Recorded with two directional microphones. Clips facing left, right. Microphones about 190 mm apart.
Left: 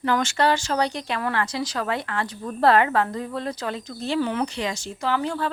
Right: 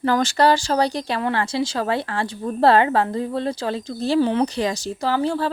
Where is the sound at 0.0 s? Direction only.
35° right (ahead or behind).